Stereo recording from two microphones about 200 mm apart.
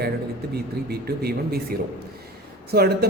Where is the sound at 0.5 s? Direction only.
50° right (ahead or behind).